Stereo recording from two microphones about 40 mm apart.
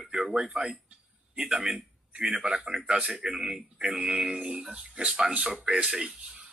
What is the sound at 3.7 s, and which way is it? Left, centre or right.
Speech, right.